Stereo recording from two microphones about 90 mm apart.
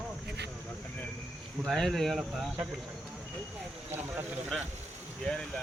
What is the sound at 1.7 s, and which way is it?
Speech, 5° left (ahead or behind).